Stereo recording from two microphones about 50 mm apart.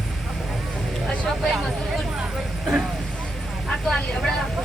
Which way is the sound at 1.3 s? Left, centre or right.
Centre.